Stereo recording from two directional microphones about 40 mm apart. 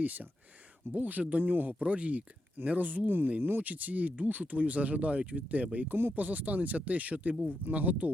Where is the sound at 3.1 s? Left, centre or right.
Right.